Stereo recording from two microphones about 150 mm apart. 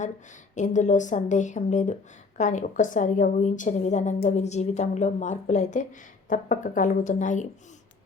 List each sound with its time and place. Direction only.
0.5 s a woman's voice: 55° left (ahead or behind)